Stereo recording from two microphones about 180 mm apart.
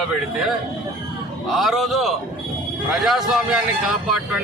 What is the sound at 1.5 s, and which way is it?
Speech, centre (ahead or behind).